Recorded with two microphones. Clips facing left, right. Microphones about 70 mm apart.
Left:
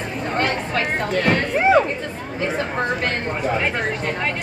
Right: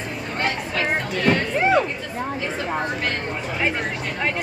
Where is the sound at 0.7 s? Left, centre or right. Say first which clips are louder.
Left 3 dB; left.